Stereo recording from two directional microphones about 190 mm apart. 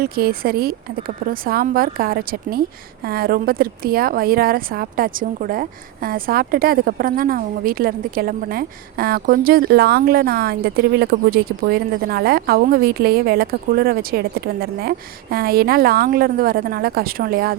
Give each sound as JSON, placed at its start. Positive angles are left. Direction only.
{"t": 0.0, "sound": "speech", "side_deg": -50}